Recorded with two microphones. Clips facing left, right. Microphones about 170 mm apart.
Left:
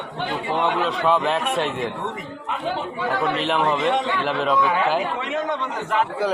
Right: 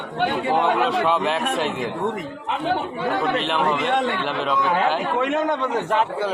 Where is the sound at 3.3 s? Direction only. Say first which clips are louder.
Even; centre (ahead or behind).